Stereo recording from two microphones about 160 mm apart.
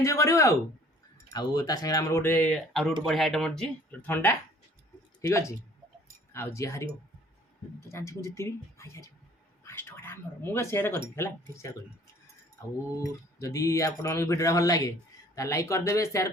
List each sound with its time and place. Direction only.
0.0 s a man's voice: 20° left (ahead or behind)
7.9 s speech: 15° left (ahead or behind)
13.4 s a man's voice: 20° left (ahead or behind)